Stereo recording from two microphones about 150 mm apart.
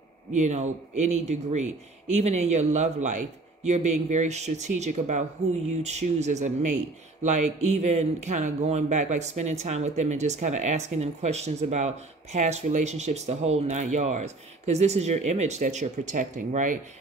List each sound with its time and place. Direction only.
0.3 s speech: 50° right (ahead or behind)